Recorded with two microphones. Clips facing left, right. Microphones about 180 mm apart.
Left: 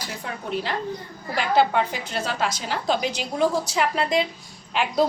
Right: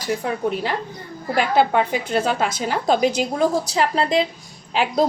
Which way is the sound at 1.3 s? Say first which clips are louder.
Right 3 dB; 50° right (ahead or behind).